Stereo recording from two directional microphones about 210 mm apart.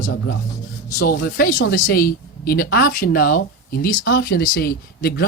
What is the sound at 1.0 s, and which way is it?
Speech, 45° left (ahead or behind).